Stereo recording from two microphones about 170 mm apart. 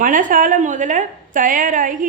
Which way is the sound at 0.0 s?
50° right (ahead or behind).